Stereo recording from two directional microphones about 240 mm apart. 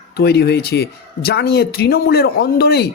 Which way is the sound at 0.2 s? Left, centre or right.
Left.